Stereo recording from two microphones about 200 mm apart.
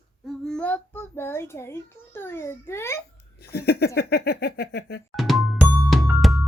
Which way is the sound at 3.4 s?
50° left (ahead or behind).